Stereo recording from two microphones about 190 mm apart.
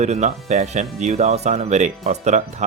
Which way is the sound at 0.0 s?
35° right (ahead or behind).